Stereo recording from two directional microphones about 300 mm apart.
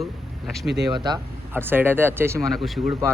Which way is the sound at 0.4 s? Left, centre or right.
Centre.